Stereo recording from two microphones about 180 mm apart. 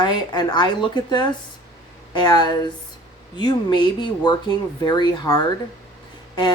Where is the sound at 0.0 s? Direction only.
25° left (ahead or behind).